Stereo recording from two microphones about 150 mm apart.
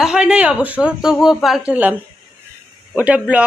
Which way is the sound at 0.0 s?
5° right (ahead or behind).